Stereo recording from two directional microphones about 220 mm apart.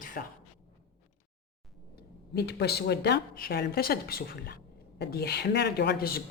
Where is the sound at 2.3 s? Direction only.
50° left (ahead or behind).